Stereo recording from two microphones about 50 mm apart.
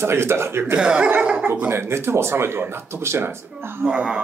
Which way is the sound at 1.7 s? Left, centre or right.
Right.